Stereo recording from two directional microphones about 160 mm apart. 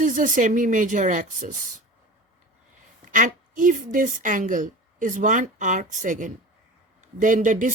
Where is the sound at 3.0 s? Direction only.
50° right (ahead or behind).